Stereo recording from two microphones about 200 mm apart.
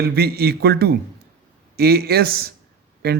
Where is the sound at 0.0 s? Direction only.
50° right (ahead or behind).